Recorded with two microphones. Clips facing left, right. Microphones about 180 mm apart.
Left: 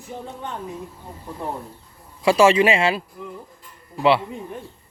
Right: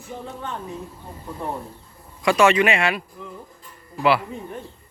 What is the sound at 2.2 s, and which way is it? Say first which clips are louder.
Speech: left 2 dB; 30° left (ahead or behind).